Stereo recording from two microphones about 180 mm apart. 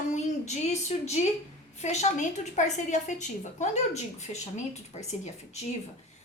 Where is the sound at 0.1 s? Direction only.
40° left (ahead or behind).